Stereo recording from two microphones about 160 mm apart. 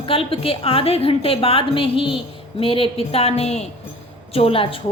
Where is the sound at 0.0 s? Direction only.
35° left (ahead or behind).